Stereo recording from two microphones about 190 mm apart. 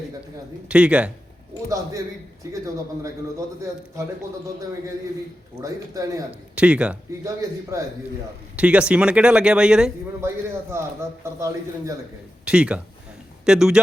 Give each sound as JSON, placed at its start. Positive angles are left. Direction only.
{"t": 0.7, "sound": "speech", "side_deg": -5}
{"t": 1.7, "sound": "a man's voice", "side_deg": -15}
{"t": 5.5, "sound": "a man's voice", "side_deg": -15}
{"t": 6.6, "sound": "a man's voice", "side_deg": -5}
{"t": 12.5, "sound": "speech", "side_deg": -5}